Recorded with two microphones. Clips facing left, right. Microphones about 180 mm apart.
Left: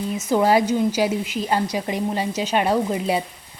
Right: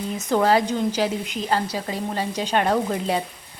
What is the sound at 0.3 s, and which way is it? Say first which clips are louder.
Speech: left 2 dB; 10° left (ahead or behind).